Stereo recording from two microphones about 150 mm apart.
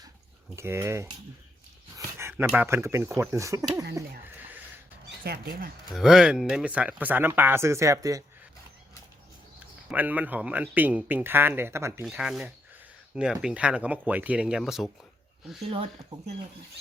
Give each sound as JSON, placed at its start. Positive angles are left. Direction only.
{"t": 0.5, "sound": "speech", "side_deg": -15}
{"t": 4.4, "sound": "a sound", "side_deg": -10}
{"t": 5.2, "sound": "speech", "side_deg": -80}
{"t": 5.9, "sound": "speech", "side_deg": -5}
{"t": 9.9, "sound": "speech", "side_deg": -10}
{"t": 12.0, "sound": "speech", "side_deg": -5}